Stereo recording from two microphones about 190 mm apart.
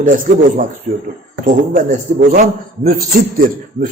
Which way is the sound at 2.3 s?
50° right (ahead or behind).